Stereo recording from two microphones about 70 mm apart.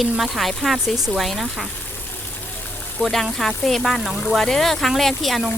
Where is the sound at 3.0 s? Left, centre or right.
Left.